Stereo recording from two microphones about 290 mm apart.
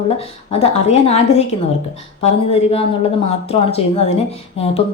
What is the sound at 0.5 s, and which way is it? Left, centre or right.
Speech, left.